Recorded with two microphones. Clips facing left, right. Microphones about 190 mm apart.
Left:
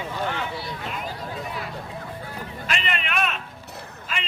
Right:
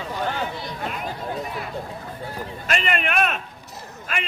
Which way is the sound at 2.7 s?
50° right (ahead or behind).